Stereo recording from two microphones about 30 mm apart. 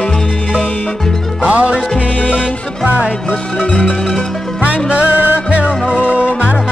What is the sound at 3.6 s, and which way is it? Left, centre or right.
Music, left.